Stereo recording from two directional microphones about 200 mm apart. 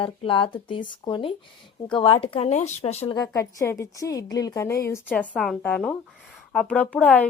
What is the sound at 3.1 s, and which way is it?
A woman's voice, 15° left (ahead or behind).